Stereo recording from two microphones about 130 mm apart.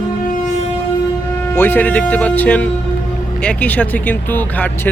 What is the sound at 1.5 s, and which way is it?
A man's voice, 15° left (ahead or behind).